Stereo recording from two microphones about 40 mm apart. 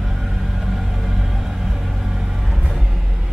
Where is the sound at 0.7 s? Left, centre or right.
Centre.